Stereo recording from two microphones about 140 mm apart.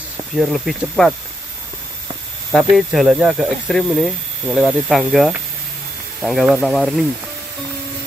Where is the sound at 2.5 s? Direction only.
Centre (ahead or behind).